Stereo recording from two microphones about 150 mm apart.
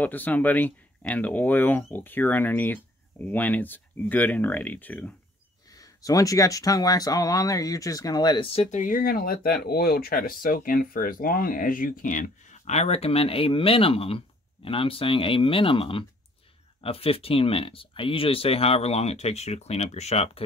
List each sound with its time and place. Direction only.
0.0 s speech: 10° left (ahead or behind)
5.7 s speech: 25° left (ahead or behind)
8.5 s speech: 50° left (ahead or behind)